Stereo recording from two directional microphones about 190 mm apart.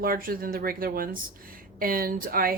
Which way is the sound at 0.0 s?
50° right (ahead or behind).